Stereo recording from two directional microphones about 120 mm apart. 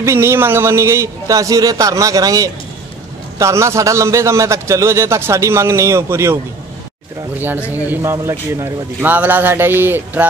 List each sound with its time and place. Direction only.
0.0 s a man's voice: 20° right (ahead or behind)